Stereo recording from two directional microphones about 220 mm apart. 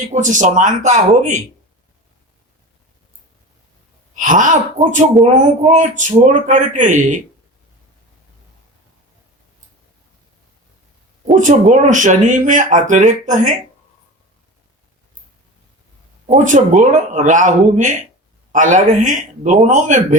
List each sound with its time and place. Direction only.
0.0 s speech: 35° right (ahead or behind)
4.2 s speech: 35° right (ahead or behind)
11.3 s speech: 35° right (ahead or behind)
16.3 s speech: 35° right (ahead or behind)